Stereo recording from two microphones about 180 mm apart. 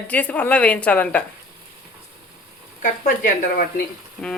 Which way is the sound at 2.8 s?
45° left (ahead or behind).